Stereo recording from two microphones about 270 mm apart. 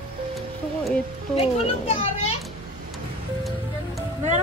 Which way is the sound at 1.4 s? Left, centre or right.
Left.